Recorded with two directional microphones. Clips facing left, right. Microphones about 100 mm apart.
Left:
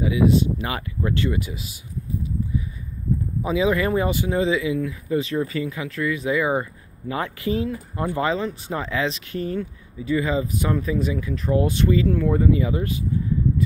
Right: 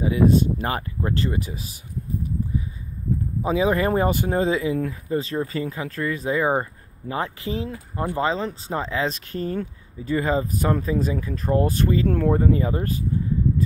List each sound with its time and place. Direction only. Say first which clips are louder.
0.0 s speech: even; 45° right (ahead or behind)
3.4 s speech: even; 35° right (ahead or behind)